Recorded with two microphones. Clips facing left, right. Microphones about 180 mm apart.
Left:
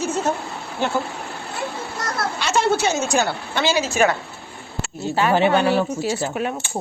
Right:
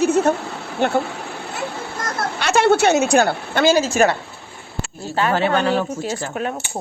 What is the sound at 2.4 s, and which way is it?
A woman's voice, 65° right (ahead or behind).